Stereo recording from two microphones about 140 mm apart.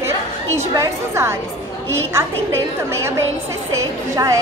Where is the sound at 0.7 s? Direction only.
20° right (ahead or behind).